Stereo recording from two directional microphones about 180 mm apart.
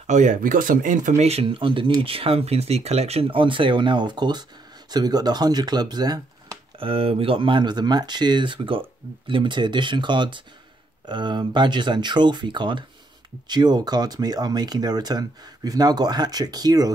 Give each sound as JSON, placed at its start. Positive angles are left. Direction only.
{"t": 0.0, "sound": "speech", "side_deg": -40}